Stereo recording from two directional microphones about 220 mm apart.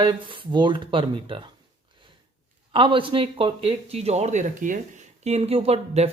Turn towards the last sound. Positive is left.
turn(degrees=-30)  # may be behind; listen again after turning